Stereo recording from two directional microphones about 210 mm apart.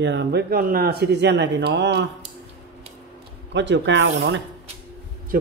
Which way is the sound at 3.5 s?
60° right (ahead or behind).